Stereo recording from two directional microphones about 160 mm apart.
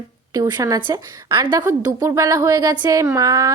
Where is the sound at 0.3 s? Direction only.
20° right (ahead or behind).